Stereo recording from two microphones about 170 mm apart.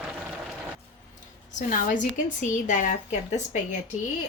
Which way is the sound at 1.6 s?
50° left (ahead or behind).